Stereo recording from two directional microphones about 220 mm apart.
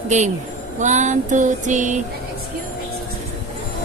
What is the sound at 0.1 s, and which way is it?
Female singing, 30° right (ahead or behind).